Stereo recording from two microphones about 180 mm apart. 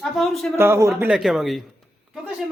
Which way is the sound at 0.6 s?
15° right (ahead or behind).